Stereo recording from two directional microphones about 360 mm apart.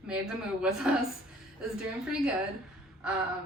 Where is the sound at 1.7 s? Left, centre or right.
Centre.